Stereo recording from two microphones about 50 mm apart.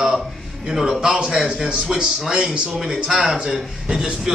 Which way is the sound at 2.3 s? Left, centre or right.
Centre.